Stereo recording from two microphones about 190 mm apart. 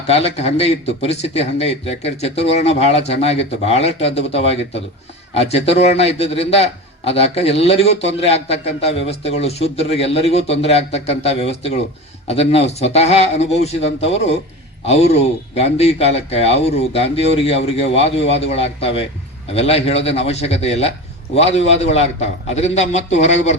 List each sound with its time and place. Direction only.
0.1 s a man's voice: 35° left (ahead or behind)